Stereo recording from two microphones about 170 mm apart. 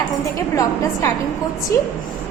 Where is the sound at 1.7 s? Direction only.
20° left (ahead or behind).